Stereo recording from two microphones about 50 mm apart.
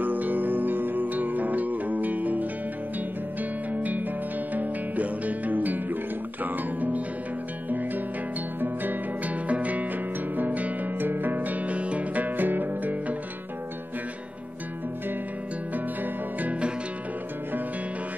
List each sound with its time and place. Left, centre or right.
0.0 s music: right
3.7 s music: right
8.5 s music: right
15.7 s music: right